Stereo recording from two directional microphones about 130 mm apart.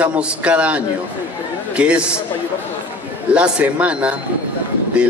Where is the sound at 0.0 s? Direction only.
10° right (ahead or behind).